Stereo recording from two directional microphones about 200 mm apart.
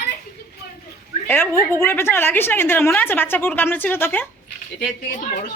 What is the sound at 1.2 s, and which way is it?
A woman's voice, 10° left (ahead or behind).